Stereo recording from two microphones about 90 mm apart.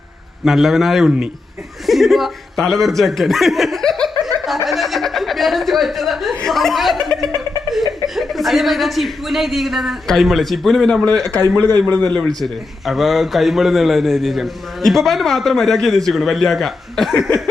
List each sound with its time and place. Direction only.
0.4 s a man's voice: centre (ahead or behind)
11.2 s speech: 40° right (ahead or behind)
11.9 s a man's voice: 20° left (ahead or behind)
12.4 s a man's voice: centre (ahead or behind)